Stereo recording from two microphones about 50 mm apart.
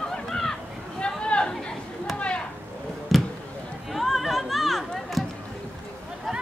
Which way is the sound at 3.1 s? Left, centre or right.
Centre.